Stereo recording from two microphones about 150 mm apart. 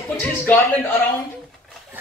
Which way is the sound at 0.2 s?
10° left (ahead or behind).